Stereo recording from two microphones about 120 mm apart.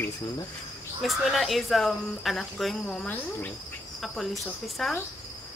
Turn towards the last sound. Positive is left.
turn(degrees=0)  # may be behind; listen again after turning